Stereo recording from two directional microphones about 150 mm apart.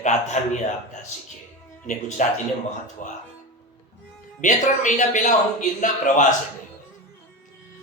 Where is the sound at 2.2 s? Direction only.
60° left (ahead or behind).